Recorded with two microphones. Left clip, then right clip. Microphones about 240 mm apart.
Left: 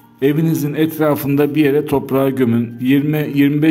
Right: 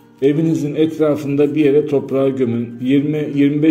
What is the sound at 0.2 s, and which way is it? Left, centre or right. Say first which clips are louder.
Speech: right 1 dB; left.